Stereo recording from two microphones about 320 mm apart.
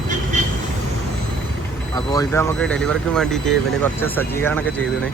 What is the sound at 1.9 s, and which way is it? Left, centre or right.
Speech, centre.